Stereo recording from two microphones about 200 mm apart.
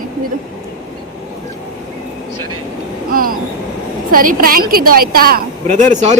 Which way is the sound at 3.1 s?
45° right (ahead or behind).